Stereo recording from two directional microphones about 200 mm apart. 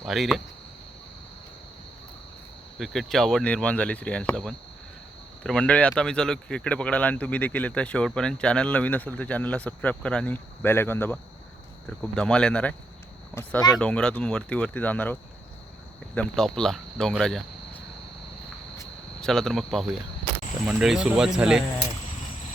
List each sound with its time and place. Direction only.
0.0 s speech: centre (ahead or behind)
2.7 s speech: centre (ahead or behind)
13.3 s speech: 15° left (ahead or behind)
13.7 s speech: 5° left (ahead or behind)
19.2 s speech: centre (ahead or behind)